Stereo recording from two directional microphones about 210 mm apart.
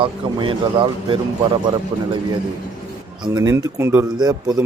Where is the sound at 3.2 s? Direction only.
15° right (ahead or behind).